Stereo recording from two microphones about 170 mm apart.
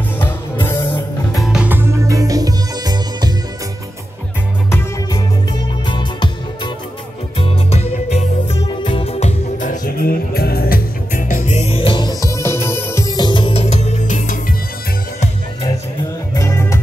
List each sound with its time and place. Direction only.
0.2 s music: 15° left (ahead or behind)
1.3 s music: centre (ahead or behind); by 3.3 s 25° right (ahead or behind)
5.1 s music: 25° left (ahead or behind); by 14.4 s 50° left (ahead or behind)
16.3 s music: 15° left (ahead or behind)